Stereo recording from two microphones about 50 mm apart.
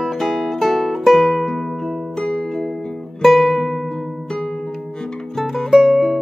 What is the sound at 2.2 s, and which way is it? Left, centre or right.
Music, centre.